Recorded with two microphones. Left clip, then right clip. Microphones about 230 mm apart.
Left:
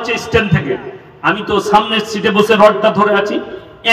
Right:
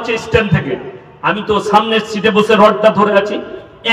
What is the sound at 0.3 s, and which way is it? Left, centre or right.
A man's voice, right.